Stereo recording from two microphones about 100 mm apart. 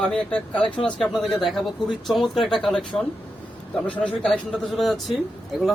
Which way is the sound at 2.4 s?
5° left (ahead or behind).